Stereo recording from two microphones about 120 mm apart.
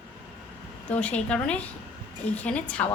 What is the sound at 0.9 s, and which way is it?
A woman's voice, 10° left (ahead or behind).